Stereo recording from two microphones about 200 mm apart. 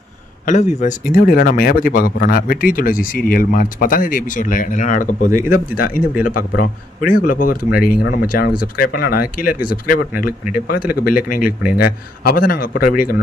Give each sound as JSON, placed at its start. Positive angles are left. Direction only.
{"t": 0.4, "sound": "speech", "side_deg": 35}